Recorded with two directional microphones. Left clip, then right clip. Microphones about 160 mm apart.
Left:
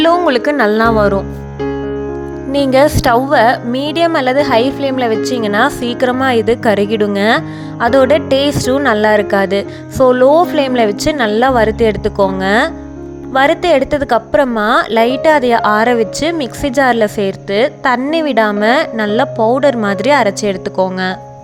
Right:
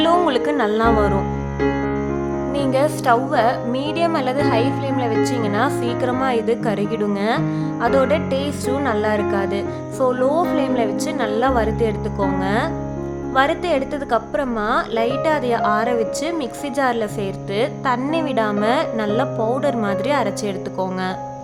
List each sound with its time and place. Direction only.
0.0 s a woman's voice: 30° left (ahead or behind)
2.5 s a woman's voice: 45° left (ahead or behind)